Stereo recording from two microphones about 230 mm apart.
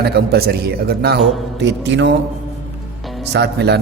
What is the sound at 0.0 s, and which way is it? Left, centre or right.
A man's voice, right.